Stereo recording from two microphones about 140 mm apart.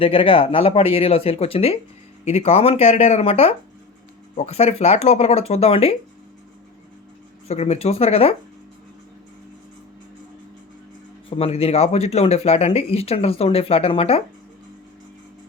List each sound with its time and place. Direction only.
0.0 s speech: 40° left (ahead or behind)
7.4 s speech: 50° left (ahead or behind)
11.3 s speech: 45° left (ahead or behind)